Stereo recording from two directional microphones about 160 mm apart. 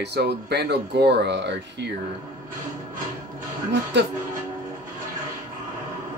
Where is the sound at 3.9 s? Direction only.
90° right.